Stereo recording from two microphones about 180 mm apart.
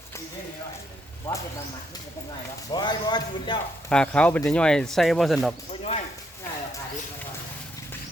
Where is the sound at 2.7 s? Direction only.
25° left (ahead or behind).